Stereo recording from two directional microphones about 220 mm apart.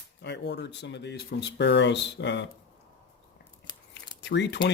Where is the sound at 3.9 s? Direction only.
50° left (ahead or behind).